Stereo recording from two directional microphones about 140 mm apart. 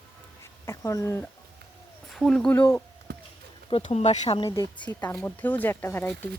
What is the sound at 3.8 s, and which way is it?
Speech, 55° left (ahead or behind).